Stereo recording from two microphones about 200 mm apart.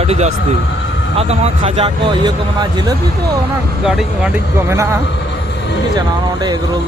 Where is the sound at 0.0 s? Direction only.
30° right (ahead or behind).